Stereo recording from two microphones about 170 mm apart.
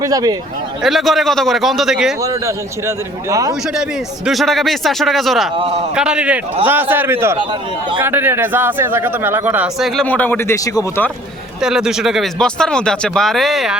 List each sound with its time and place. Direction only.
0.0 s speech: 20° right (ahead or behind)
0.8 s speech: centre (ahead or behind)
2.8 s speech: 20° right (ahead or behind)
4.3 s speech: centre (ahead or behind)
5.5 s a man's voice: 35° right (ahead or behind)
5.9 s speech: 5° right (ahead or behind)
9.9 s speech: 5° left (ahead or behind)
11.6 s speech: 5° right (ahead or behind)